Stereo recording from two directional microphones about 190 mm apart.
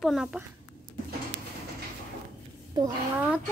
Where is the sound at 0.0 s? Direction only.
Centre (ahead or behind).